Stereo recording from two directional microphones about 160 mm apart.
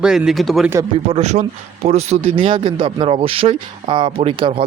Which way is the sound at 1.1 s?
45° right (ahead or behind).